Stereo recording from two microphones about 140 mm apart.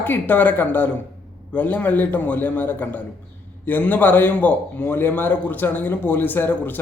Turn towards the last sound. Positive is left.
turn(degrees=15)  # may be behind; listen again after turning